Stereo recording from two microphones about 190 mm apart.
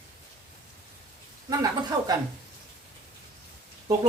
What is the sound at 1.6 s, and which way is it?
Speech, 20° right (ahead or behind).